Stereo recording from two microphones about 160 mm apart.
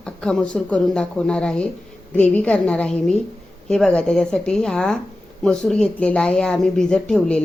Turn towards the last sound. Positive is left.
turn(degrees=5)  # may be behind; listen again after turning